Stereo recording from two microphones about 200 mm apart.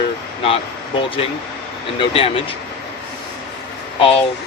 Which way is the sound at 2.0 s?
30° left (ahead or behind).